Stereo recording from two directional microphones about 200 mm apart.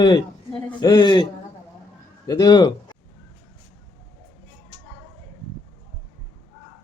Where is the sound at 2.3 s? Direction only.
20° left (ahead or behind).